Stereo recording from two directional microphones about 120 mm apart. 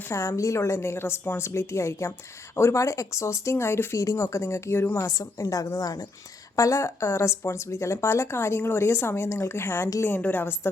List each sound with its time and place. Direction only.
0.0 s speech: 25° left (ahead or behind)